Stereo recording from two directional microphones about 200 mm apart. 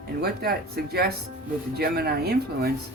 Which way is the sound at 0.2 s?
50° right (ahead or behind).